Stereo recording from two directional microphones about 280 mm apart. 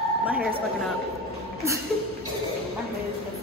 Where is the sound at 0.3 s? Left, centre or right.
Centre.